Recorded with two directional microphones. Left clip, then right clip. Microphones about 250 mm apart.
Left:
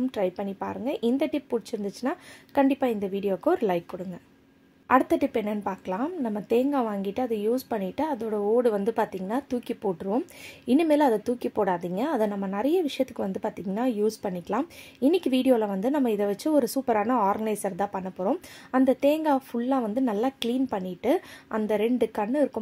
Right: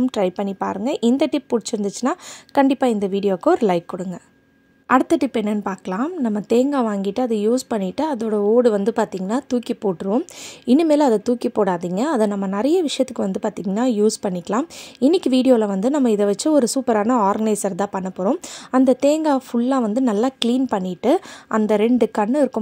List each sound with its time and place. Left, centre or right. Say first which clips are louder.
0.0 s speech: right 7 dB; right